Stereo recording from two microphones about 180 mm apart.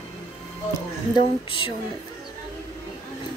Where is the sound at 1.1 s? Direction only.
30° left (ahead or behind).